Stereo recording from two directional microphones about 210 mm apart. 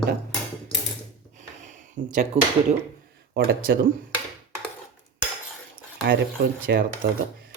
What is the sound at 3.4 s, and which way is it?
Speech, 45° right (ahead or behind).